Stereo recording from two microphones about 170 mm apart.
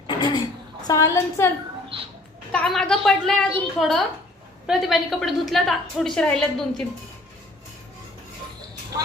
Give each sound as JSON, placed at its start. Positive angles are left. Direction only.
{"t": 0.1, "sound": "a sound", "side_deg": 25}
{"t": 0.9, "sound": "a woman's voice", "side_deg": 20}
{"t": 1.9, "sound": "a child's voice", "side_deg": -30}
{"t": 2.5, "sound": "a woman's voice", "side_deg": 5}